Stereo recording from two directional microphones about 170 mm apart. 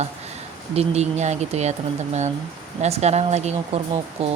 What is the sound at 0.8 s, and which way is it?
Speech, 40° right (ahead or behind).